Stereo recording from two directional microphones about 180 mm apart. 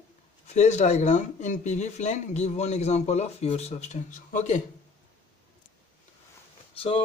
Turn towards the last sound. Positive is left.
turn(degrees=30)  # may be behind; listen again after turning